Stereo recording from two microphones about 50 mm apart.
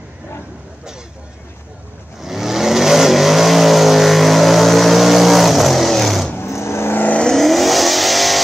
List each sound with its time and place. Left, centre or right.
2.2 s vehicle: centre
6.3 s vehicle: left
7.3 s vehicle: centre